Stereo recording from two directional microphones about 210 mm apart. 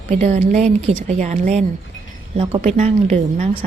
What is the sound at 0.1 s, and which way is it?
A woman's voice, 30° right (ahead or behind).